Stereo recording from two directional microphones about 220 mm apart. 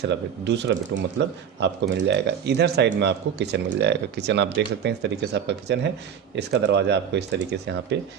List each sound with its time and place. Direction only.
0.1 s speech: 50° right (ahead or behind)